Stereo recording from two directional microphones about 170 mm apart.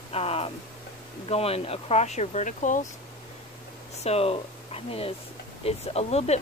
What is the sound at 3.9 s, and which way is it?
Speech, 40° left (ahead or behind).